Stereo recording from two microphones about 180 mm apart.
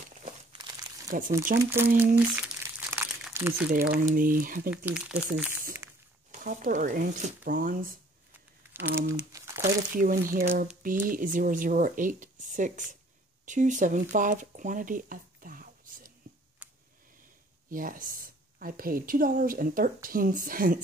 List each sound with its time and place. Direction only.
0.5 s crumpling: 25° right (ahead or behind)
1.1 s a woman's voice: 50° right (ahead or behind)
1.6 s speech: 15° right (ahead or behind)
2.0 s crumpling: 10° right (ahead or behind)
3.3 s speech: 15° right (ahead or behind)
3.7 s a woman's voice: 55° right (ahead or behind)
4.6 s speech: 5° right (ahead or behind)
6.4 s a woman's voice: 50° right (ahead or behind)
9.0 s crumpling: 15° right (ahead or behind)
9.9 s a woman's voice: 50° right (ahead or behind)
16.6 s a sound: 10° right (ahead or behind)
17.6 s a woman's voice: 50° right (ahead or behind)